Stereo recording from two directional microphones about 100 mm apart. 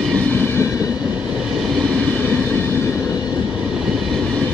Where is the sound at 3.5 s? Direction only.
5° right (ahead or behind).